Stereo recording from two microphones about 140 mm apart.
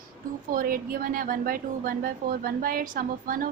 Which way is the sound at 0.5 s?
90° right.